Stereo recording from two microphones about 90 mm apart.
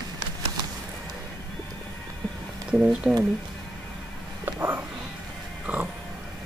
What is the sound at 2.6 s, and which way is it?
Speech, 10° right (ahead or behind).